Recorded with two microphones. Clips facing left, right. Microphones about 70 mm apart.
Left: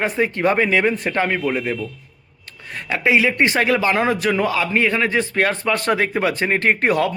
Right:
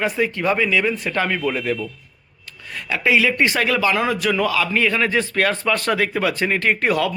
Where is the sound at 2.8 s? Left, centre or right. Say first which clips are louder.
Left 1 dB; left.